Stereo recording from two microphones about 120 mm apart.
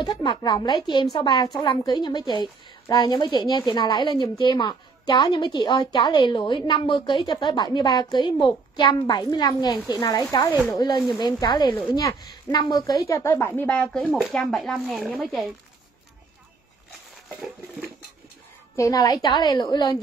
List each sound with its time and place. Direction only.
0.0 s a woman's voice: 35° left (ahead or behind); by 15.1 s centre (ahead or behind)
18.8 s a woman's voice: 30° left (ahead or behind)